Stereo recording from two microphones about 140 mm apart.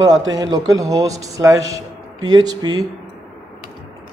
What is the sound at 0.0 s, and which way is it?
A man's voice, 25° right (ahead or behind).